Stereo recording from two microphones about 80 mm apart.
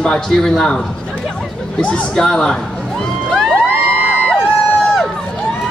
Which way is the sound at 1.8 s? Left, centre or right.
Centre.